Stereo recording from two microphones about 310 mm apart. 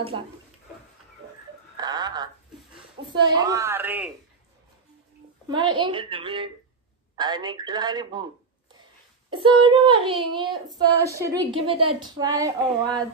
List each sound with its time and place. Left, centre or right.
1.8 s a sound: centre
3.2 s speech: centre
5.5 s speech: centre
9.3 s speech: centre